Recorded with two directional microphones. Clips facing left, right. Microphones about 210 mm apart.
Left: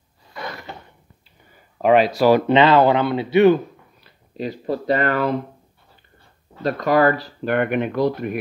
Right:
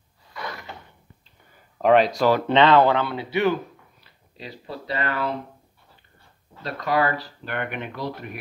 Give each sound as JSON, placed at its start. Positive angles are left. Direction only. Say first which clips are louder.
{"t": 1.8, "sound": "speech", "louder": "left 2 dB", "side_deg": 5}
{"t": 4.4, "sound": "speech", "louder": "left 11 dB", "side_deg": 45}
{"t": 6.6, "sound": "speech", "louder": "left 7 dB", "side_deg": 45}